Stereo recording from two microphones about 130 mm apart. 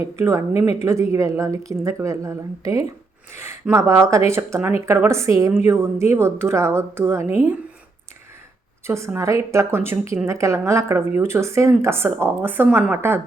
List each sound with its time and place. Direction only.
0.0 s speech: 25° right (ahead or behind)
8.9 s a woman's voice: 20° right (ahead or behind)